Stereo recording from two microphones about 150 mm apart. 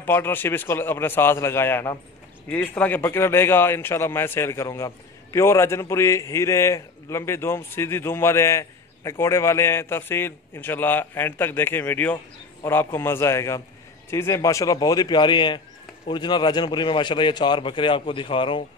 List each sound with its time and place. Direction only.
0.0 s a man's voice: 15° left (ahead or behind); by 18.6 s 35° left (ahead or behind)